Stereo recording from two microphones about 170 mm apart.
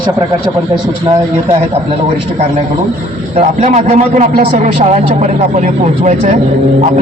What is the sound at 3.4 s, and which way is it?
Speech, 45° right (ahead or behind).